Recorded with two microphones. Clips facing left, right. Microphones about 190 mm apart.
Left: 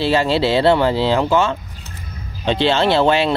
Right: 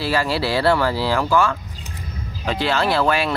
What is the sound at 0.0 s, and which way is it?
Speech, 25° left (ahead or behind).